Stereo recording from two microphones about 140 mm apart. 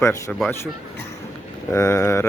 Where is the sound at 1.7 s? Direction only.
20° left (ahead or behind).